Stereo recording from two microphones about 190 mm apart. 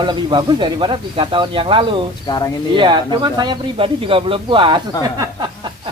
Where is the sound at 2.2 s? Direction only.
20° left (ahead or behind).